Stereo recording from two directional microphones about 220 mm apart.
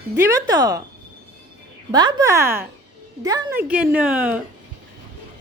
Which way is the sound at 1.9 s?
15° right (ahead or behind).